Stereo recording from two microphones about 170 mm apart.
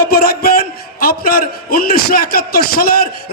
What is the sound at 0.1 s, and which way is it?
A man's voice, 65° left (ahead or behind).